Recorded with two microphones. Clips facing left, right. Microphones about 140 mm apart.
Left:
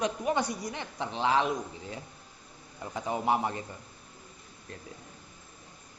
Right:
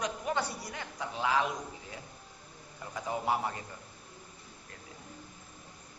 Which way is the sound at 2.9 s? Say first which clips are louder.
Left 3 dB; 20° left (ahead or behind).